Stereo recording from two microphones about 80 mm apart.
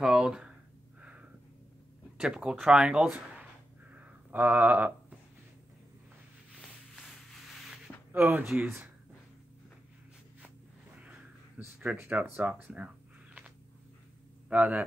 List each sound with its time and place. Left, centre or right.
0.0 s speech: centre
2.1 s speech: centre
3.9 s a sound: right
8.1 s speech: right
11.0 s a sound: centre
14.5 s speech: centre